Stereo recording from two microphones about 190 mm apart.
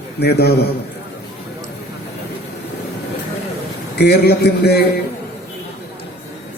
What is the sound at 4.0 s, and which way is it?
Speech, 60° left (ahead or behind).